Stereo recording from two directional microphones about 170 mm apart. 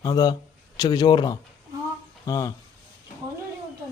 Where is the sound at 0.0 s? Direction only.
25° left (ahead or behind).